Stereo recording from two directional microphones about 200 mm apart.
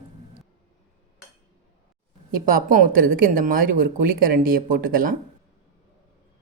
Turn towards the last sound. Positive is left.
turn(degrees=-45)  # may be behind; listen again after turning